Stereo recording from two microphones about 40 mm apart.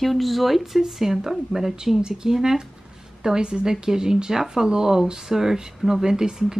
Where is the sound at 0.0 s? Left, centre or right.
Centre.